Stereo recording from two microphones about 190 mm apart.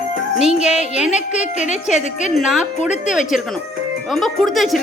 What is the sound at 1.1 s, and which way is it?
A woman's voice, 35° left (ahead or behind).